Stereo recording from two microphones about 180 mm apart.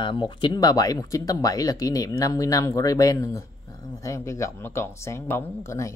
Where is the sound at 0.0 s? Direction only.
25° left (ahead or behind).